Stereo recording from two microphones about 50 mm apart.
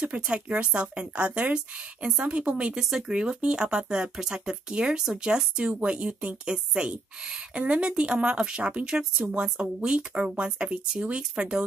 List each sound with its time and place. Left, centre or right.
0.0 s speech: right
2.7 s speech: centre
3.1 s speech: centre